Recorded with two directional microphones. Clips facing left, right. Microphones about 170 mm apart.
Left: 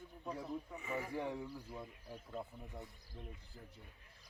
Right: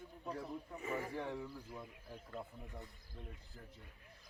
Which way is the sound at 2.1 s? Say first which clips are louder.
Left 2 dB; 15° left (ahead or behind).